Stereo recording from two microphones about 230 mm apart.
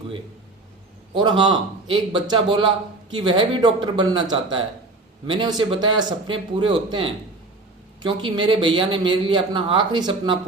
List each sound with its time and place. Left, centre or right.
1.1 s speech: right